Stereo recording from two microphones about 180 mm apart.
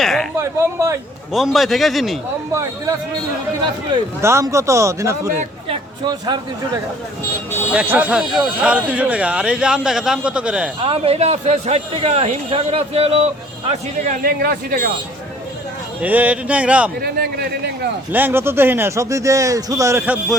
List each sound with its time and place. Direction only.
0.0 s a sound: centre (ahead or behind)
0.3 s speech: 15° right (ahead or behind)
1.3 s a man's voice: centre (ahead or behind)
4.2 s speech: 15° right (ahead or behind)
7.7 s speech: 10° right (ahead or behind)
10.8 s a man's voice: 30° right (ahead or behind)
14.2 s speech: 55° right (ahead or behind)
16.0 s speech: 10° right (ahead or behind)
17.0 s speech: 60° right (ahead or behind)
18.1 s speech: 10° right (ahead or behind)